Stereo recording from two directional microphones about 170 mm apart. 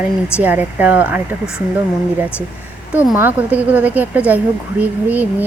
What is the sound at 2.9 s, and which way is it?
A woman's voice, 10° right (ahead or behind).